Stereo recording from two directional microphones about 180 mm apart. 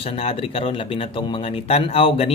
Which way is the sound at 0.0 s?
30° left (ahead or behind).